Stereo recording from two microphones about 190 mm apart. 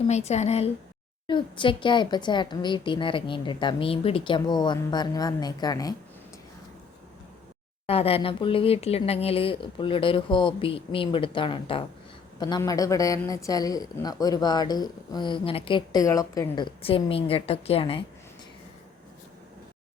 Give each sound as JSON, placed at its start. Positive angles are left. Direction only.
{"t": 0.1, "sound": "a woman's voice", "side_deg": 35}
{"t": 7.9, "sound": "speech", "side_deg": 30}